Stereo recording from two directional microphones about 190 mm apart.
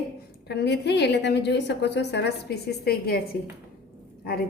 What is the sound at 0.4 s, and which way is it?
A woman's voice, 60° left (ahead or behind).